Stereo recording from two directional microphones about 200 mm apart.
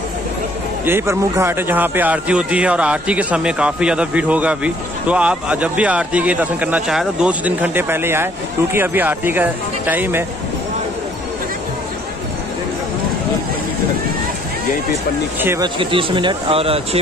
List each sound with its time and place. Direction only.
0.8 s speech: 10° right (ahead or behind)
15.4 s speech: 15° right (ahead or behind)
15.8 s speech: 25° right (ahead or behind)